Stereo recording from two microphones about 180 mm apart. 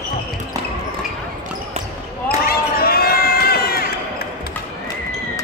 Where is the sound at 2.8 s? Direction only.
60° left (ahead or behind).